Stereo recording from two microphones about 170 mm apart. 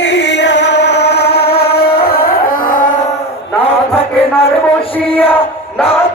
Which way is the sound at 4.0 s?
35° left (ahead or behind).